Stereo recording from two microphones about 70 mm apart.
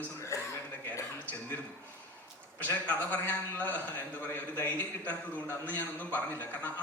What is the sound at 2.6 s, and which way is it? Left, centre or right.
A man's voice, left.